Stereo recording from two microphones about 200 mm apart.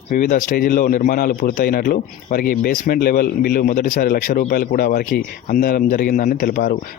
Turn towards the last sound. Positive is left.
turn(degrees=45)  # may be behind; listen again after turning